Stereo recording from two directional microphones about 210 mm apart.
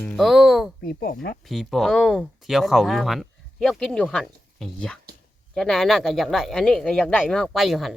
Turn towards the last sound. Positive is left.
turn(degrees=0)  # may be behind; listen again after turning